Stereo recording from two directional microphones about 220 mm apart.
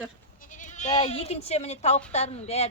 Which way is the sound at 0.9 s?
25° left (ahead or behind).